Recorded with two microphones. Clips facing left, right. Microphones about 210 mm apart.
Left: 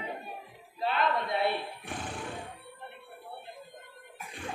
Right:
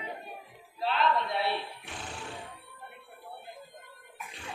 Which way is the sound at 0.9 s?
50° left (ahead or behind).